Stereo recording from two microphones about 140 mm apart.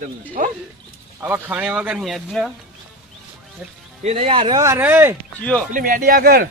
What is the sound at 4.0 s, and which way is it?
Speech, 50° right (ahead or behind).